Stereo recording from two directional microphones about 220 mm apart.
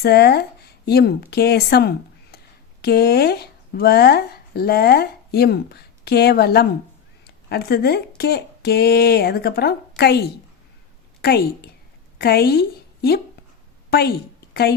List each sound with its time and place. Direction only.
0.0 s a woman's voice: 45° left (ahead or behind)